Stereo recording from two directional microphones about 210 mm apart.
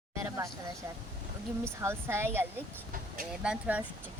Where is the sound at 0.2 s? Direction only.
15° right (ahead or behind).